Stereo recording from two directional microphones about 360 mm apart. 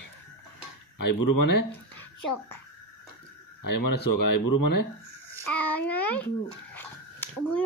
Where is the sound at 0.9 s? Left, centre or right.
Left.